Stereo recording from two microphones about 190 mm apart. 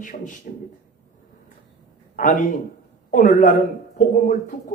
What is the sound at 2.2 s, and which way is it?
A man's voice, 45° left (ahead or behind).